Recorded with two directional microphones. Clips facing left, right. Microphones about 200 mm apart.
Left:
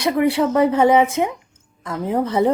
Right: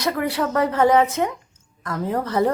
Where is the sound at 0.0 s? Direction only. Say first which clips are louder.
Left 5 dB; 20° left (ahead or behind).